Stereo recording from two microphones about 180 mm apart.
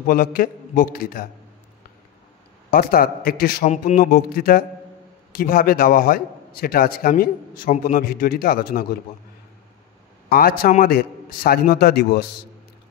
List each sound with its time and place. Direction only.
0.0 s a man's voice: 55° left (ahead or behind)
2.7 s a man's voice: 55° left (ahead or behind)
3.6 s a man's voice: 40° left (ahead or behind)
10.3 s a man's voice: 55° left (ahead or behind)